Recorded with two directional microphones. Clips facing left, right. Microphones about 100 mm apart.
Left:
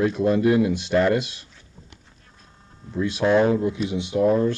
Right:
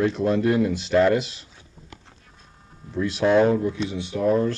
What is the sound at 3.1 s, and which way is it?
Speech, 5° left (ahead or behind).